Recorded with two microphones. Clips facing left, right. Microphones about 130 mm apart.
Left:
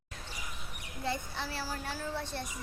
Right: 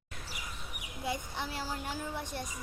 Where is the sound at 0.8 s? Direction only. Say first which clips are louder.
Left 1 dB; 10° right (ahead or behind).